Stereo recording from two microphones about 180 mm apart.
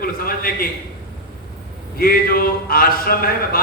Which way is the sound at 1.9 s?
55° left (ahead or behind).